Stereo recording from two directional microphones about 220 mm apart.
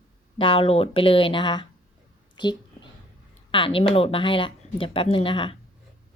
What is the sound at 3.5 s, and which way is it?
Speech, 25° left (ahead or behind).